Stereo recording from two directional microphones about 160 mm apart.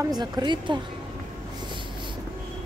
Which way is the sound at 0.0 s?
25° right (ahead or behind).